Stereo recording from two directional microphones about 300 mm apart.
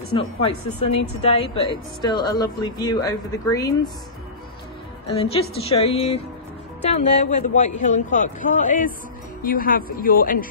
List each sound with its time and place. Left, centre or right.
0.1 s speech: centre
5.0 s speech: centre